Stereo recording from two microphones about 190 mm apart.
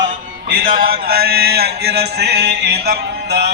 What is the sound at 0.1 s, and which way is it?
Music, 50° right (ahead or behind).